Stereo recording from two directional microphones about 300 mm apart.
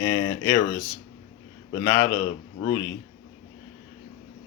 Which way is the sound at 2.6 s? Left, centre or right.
Centre.